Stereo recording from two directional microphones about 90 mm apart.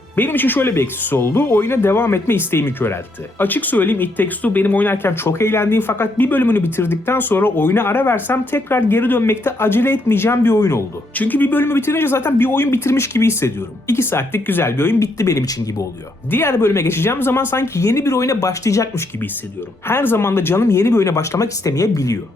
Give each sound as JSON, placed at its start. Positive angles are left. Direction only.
{"t": 0.2, "sound": "speech", "side_deg": 20}
{"t": 11.1, "sound": "speech", "side_deg": 20}
{"t": 15.0, "sound": "speech", "side_deg": 40}
{"t": 16.3, "sound": "speech", "side_deg": 25}
{"t": 19.9, "sound": "speech", "side_deg": 25}